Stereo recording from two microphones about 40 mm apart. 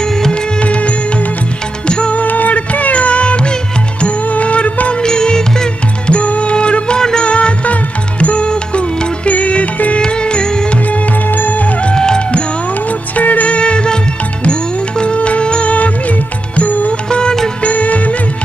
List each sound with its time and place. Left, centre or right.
0.0 s music: centre
0.6 s music: left
2.2 s music: left
5.0 s music: centre
6.1 s music: left; by 7.2 s centre
7.2 s music: left
10.0 s music: left
11.2 s music: left
11.8 s music: centre
13.1 s music: left
13.6 s music: left
17.1 s music: left
17.6 s music: left